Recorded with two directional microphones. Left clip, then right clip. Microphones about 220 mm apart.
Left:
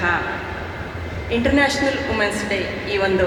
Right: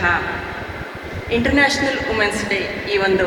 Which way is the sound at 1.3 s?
55° left (ahead or behind).